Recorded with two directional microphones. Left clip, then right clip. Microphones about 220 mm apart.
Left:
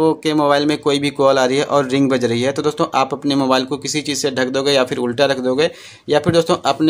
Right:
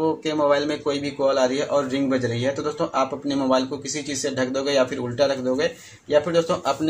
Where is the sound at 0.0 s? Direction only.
40° left (ahead or behind).